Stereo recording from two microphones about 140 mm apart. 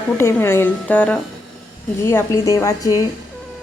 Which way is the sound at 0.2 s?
15° left (ahead or behind).